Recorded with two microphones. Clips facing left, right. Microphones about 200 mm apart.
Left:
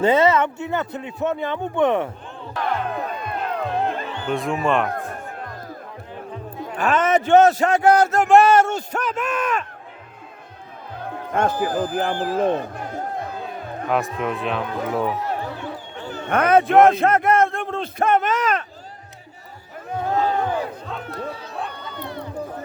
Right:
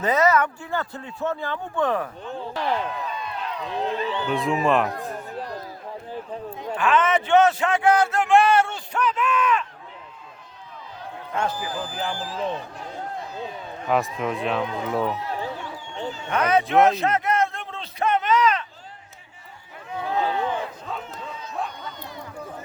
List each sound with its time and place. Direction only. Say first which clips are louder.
0.0 s speech: left 4 dB; 30° left (ahead or behind)
2.4 s music: left 1 dB; 30° right (ahead or behind)
2.8 s music: left 3 dB; 55° left (ahead or behind)
4.3 s speech: left 1 dB; centre (ahead or behind)
4.9 s music: left 2 dB; 50° left (ahead or behind)
6.7 s a man's voice: left 2 dB; 40° left (ahead or behind)
11.0 s a sound: left 5 dB; 50° left (ahead or behind)
13.8 s speech: left 1 dB; centre (ahead or behind)
15.3 s a sound: left 3 dB; 55° left (ahead or behind)
19.9 s a sound: left 4 dB; 45° left (ahead or behind)
21.1 s bow-wow: left 6 dB; 70° left (ahead or behind)
21.7 s a sound: left 4 dB; 60° left (ahead or behind)